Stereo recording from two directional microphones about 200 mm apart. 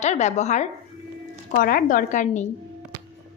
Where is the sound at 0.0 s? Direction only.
35° left (ahead or behind).